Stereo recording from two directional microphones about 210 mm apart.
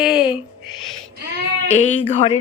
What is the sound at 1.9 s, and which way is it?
Speech, 30° left (ahead or behind).